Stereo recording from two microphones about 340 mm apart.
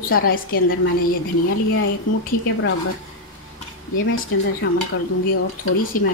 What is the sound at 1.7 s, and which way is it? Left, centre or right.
Speech, left.